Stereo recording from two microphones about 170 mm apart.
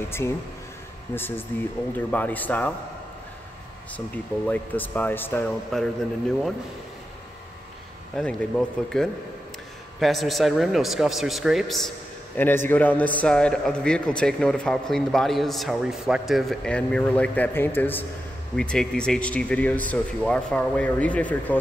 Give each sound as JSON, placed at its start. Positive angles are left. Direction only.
{"t": 0.2, "sound": "speech", "side_deg": 15}
{"t": 4.5, "sound": "speech", "side_deg": 10}
{"t": 8.2, "sound": "a man's voice", "side_deg": 5}
{"t": 12.4, "sound": "a man's voice", "side_deg": 10}